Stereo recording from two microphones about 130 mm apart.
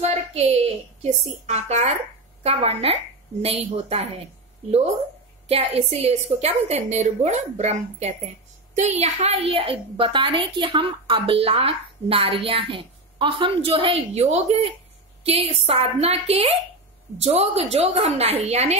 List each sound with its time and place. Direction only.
0.0 s a sound: 55° right (ahead or behind)
1.0 s a woman's voice: 55° right (ahead or behind)
5.5 s a woman's voice: 50° right (ahead or behind)
14.2 s a woman's voice: 60° right (ahead or behind)